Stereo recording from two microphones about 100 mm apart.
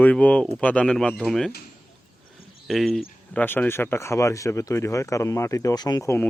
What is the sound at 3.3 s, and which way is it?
Speech, 15° left (ahead or behind).